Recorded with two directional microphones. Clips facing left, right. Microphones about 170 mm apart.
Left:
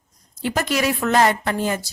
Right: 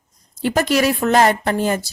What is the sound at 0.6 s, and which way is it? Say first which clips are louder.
Speech: right 5 dB; 35° right (ahead or behind).